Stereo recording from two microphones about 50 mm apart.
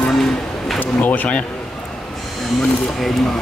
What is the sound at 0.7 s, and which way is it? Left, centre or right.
Speech, left.